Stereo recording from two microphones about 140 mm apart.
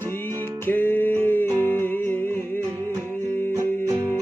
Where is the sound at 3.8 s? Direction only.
15° right (ahead or behind).